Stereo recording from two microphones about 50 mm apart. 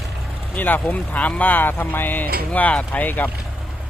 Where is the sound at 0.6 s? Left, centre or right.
Left.